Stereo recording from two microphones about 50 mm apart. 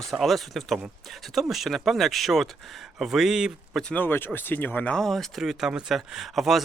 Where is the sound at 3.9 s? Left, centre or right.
Left.